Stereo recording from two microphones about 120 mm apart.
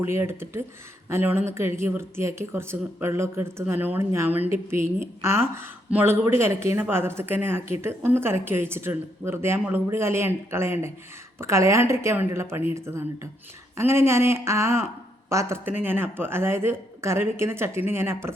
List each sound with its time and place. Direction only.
0.0 s speech: 20° right (ahead or behind)